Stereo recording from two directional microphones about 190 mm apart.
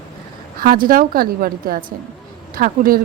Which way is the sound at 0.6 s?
50° right (ahead or behind).